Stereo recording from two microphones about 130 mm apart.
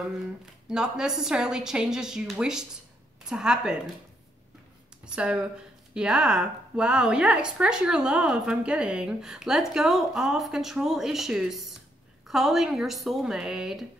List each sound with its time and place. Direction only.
0.7 s speech: 5° right (ahead or behind)
5.0 s speech: 5° right (ahead or behind)